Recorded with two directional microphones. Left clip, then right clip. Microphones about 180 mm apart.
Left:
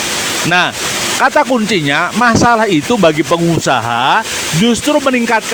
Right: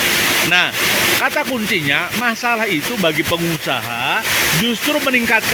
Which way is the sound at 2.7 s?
30° left (ahead or behind).